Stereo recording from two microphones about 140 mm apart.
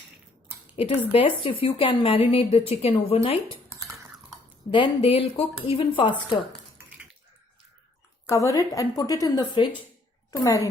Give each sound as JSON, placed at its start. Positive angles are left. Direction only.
{"t": 0.8, "sound": "a woman's voice", "side_deg": 40}
{"t": 4.7, "sound": "speech", "side_deg": 40}
{"t": 8.3, "sound": "a woman's voice", "side_deg": 20}